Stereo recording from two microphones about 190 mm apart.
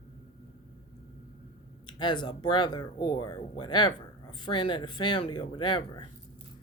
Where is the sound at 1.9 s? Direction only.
25° left (ahead or behind).